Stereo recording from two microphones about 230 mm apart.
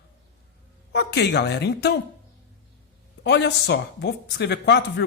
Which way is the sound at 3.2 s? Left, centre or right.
Left.